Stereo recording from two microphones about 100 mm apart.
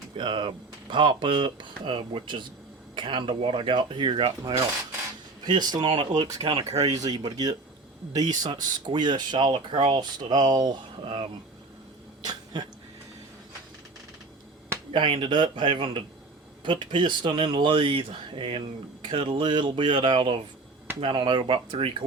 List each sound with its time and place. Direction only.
0.2 s speech: 55° right (ahead or behind)
5.5 s speech: 45° right (ahead or behind)
5.8 s speech: 60° right (ahead or behind)
6.8 s speech: 40° right (ahead or behind)
8.4 s speech: 50° right (ahead or behind)
12.2 s dog: 45° right (ahead or behind)
14.9 s speech: 55° right (ahead or behind)